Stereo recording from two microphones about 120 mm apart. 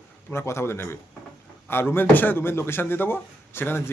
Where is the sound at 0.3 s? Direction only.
20° left (ahead or behind).